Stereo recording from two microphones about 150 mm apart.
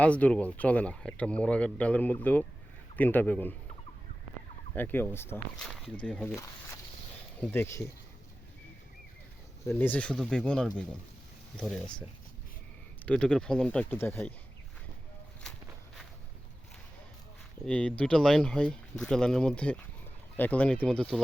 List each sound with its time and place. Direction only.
0.0 s speech: 10° left (ahead or behind)
4.7 s speech: 10° left (ahead or behind)
5.6 s speech: centre (ahead or behind)
7.5 s speech: 15° left (ahead or behind)
9.6 s speech: 15° left (ahead or behind)
13.1 s speech: 5° left (ahead or behind)
17.7 s speech: 10° left (ahead or behind)